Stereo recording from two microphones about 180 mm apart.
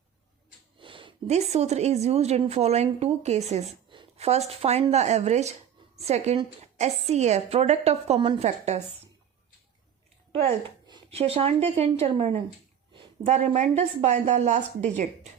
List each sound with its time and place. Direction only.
0.8 s speech: 30° right (ahead or behind)
10.8 s a woman's voice: 30° right (ahead or behind)
12.9 s a sound: 25° right (ahead or behind)
13.3 s speech: 40° right (ahead or behind)